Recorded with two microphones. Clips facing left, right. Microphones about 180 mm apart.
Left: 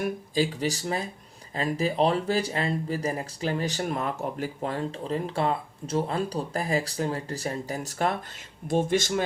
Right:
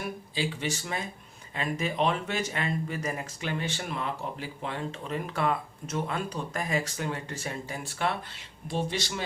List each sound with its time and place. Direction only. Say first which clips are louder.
0.0 s speech: left 6 dB; 40° left (ahead or behind)